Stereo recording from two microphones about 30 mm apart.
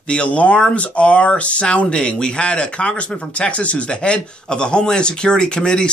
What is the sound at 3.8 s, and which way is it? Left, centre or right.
Speech, left.